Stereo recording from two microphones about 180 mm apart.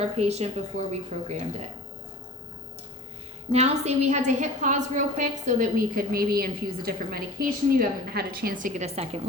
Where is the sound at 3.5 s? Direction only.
35° right (ahead or behind).